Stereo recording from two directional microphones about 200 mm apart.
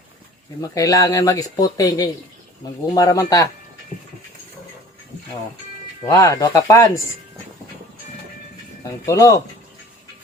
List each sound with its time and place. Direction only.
0.6 s speech: 15° left (ahead or behind)
6.0 s speech: 15° left (ahead or behind)
8.8 s speech: 15° left (ahead or behind)